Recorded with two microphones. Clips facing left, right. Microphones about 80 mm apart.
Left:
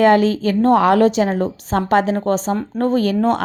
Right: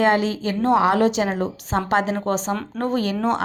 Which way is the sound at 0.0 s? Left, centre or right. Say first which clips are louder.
Left 6 dB; left.